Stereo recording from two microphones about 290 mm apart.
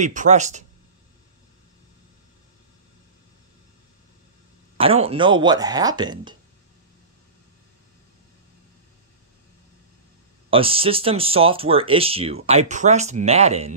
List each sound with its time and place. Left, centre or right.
0.0 s speech: right
4.7 s speech: centre
10.5 s speech: centre